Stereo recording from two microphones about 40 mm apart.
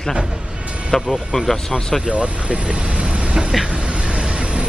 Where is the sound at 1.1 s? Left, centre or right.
Centre.